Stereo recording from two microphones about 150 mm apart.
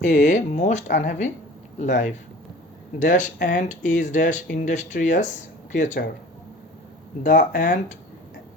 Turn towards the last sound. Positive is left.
turn(degrees=60)  # may be behind; listen again after turning